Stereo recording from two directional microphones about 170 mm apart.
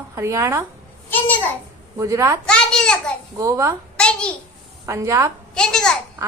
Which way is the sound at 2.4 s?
5° left (ahead or behind).